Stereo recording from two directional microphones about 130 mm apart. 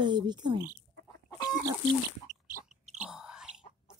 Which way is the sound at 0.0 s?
35° right (ahead or behind).